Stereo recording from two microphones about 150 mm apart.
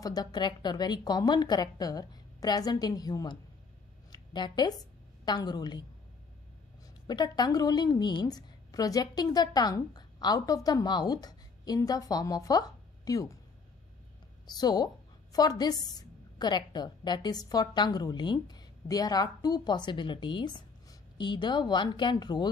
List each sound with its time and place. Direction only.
0.0 s a woman's voice: 25° left (ahead or behind)
7.1 s a woman's voice: 25° left (ahead or behind)
14.4 s a woman's voice: 25° left (ahead or behind)